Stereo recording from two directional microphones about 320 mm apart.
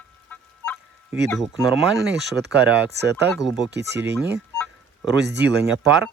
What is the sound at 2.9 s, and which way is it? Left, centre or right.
Speech, right.